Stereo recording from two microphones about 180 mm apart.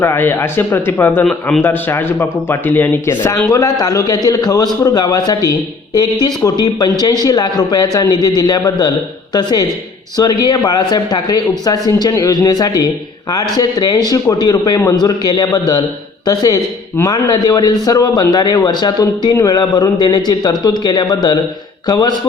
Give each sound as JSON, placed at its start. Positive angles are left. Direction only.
{"t": 0.0, "sound": "a man's voice", "side_deg": 10}